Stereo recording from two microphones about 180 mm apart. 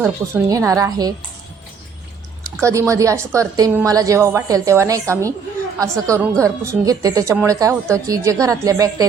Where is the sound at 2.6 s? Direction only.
15° right (ahead or behind).